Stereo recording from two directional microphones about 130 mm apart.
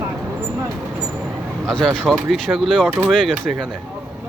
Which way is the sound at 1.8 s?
5° right (ahead or behind).